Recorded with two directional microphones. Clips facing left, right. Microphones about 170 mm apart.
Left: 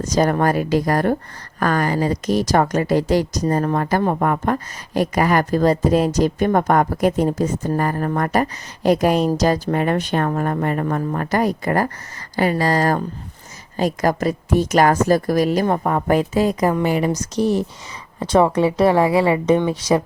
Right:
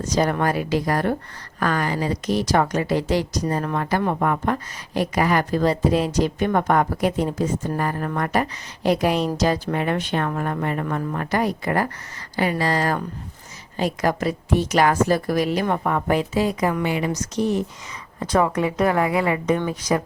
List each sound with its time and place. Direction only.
0.0 s speech: 45° left (ahead or behind); by 20.0 s 25° left (ahead or behind)